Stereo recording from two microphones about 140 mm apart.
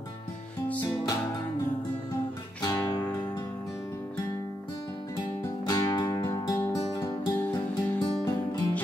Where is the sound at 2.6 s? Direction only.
25° left (ahead or behind).